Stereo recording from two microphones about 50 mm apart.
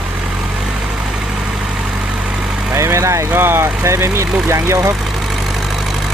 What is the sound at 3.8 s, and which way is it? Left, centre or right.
Speech, right.